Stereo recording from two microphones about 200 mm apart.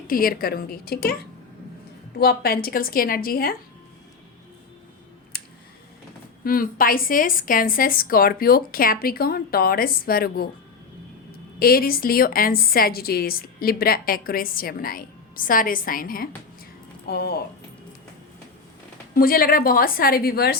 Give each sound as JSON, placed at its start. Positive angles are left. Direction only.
{"t": 0.1, "sound": "a woman's voice", "side_deg": 45}
{"t": 2.1, "sound": "a woman's voice", "side_deg": 50}
{"t": 5.3, "sound": "a sound", "side_deg": 50}
{"t": 6.4, "sound": "a woman's voice", "side_deg": 45}
{"t": 11.6, "sound": "a woman's voice", "side_deg": 50}
{"t": 19.1, "sound": "a woman's voice", "side_deg": 45}